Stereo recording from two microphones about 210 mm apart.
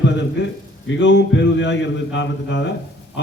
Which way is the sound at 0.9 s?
60° left (ahead or behind).